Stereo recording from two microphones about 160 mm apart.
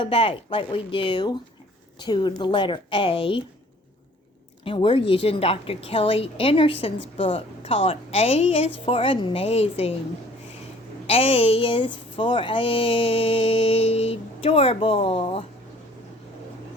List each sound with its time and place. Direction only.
0.0 s speech: 35° left (ahead or behind)
4.6 s speech: 30° left (ahead or behind)
11.0 s speech: 35° left (ahead or behind)